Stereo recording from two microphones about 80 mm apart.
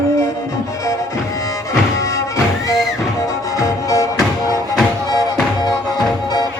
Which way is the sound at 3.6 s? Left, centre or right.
Left.